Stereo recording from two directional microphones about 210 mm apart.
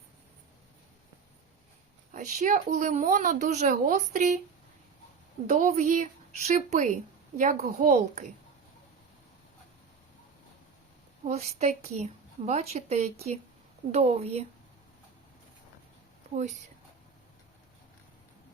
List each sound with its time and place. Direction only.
2.1 s speech: 40° right (ahead or behind)
5.5 s speech: 35° right (ahead or behind)
11.3 s a woman's voice: 30° right (ahead or behind)